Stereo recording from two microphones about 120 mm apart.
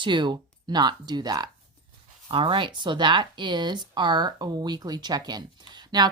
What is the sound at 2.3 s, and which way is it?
Speech, 45° right (ahead or behind).